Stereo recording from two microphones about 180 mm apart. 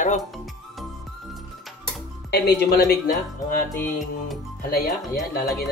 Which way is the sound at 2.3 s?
60° left (ahead or behind).